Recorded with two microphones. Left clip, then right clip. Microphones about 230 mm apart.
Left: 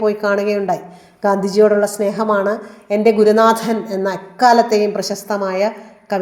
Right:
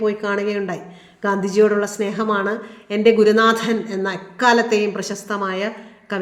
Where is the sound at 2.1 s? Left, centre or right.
Centre.